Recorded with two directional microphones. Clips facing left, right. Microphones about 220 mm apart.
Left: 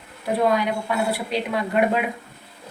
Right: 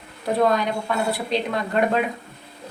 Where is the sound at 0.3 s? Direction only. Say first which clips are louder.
Even; 10° left (ahead or behind).